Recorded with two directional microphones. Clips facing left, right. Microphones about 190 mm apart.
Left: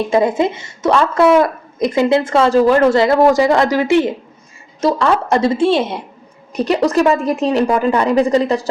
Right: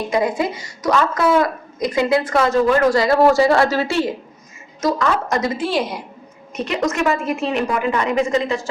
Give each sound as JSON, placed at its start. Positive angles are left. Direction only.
{"t": 0.1, "sound": "a woman's voice", "side_deg": 25}
{"t": 4.8, "sound": "a woman's voice", "side_deg": 30}
{"t": 6.6, "sound": "a woman's voice", "side_deg": 35}